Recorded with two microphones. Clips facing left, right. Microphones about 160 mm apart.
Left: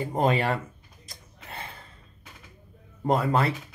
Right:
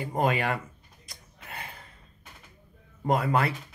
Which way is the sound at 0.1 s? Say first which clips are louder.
Left 2 dB; 25° left (ahead or behind).